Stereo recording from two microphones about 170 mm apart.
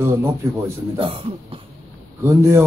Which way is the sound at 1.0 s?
30° right (ahead or behind).